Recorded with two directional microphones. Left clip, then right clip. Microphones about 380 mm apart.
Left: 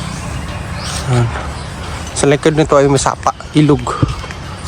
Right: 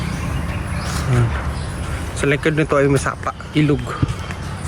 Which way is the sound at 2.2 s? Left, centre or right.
Centre.